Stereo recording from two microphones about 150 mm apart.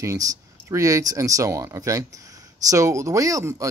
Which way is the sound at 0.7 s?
20° right (ahead or behind).